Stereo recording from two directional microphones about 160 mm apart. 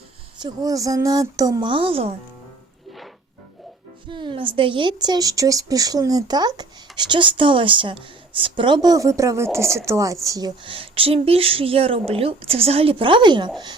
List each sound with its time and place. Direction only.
0.3 s speech: 25° right (ahead or behind)
4.1 s speech: 30° right (ahead or behind)